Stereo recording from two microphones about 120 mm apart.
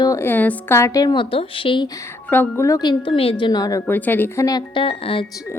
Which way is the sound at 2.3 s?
20° left (ahead or behind).